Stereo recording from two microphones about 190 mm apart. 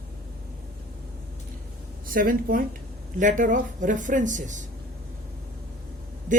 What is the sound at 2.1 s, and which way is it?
Speech, 50° right (ahead or behind).